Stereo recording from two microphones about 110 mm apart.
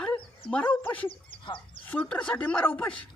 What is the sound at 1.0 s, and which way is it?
Speech, 50° left (ahead or behind).